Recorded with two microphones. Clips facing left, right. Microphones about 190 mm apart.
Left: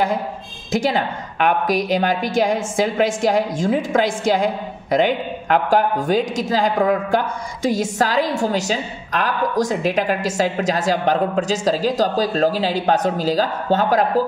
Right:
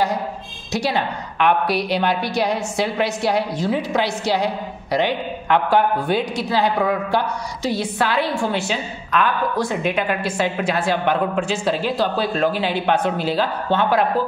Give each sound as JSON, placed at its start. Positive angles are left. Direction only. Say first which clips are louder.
{"t": 0.7, "sound": "a woman's voice", "louder": "left 2 dB", "side_deg": 50}